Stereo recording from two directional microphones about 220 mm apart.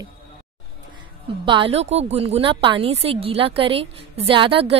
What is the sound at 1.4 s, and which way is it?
A woman's voice, 25° right (ahead or behind).